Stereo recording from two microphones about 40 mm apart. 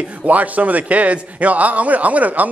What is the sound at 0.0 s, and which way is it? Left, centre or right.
Speech, right.